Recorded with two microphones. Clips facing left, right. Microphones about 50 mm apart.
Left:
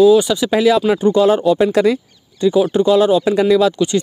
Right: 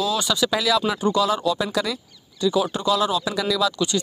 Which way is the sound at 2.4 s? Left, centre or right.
Left.